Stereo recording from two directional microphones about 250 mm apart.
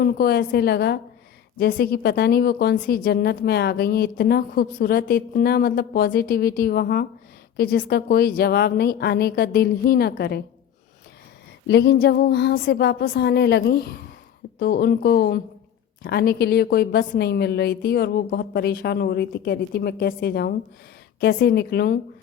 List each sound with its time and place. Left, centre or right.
0.0 s a woman's voice: left
11.7 s a woman's voice: left